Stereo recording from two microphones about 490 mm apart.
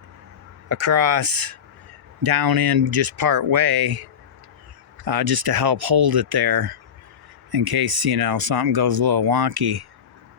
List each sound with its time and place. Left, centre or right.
0.7 s speech: right